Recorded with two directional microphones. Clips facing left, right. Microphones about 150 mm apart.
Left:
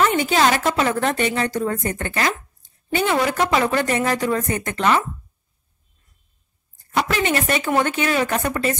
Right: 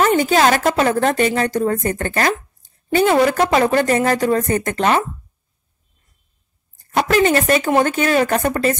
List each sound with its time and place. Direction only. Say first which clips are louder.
0.0 s a woman's voice: right 3 dB; 40° right (ahead or behind)
6.9 s a woman's voice: right 6 dB; 45° right (ahead or behind)